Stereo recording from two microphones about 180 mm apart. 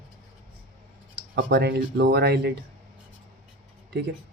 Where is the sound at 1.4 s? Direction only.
70° right (ahead or behind).